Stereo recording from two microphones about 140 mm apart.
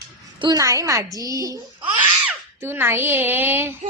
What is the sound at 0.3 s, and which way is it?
A child's voice, 30° right (ahead or behind).